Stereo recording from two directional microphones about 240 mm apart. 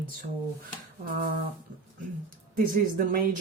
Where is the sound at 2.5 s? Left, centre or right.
Right.